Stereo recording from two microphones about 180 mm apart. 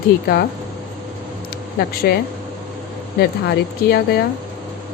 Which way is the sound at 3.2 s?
60° left (ahead or behind).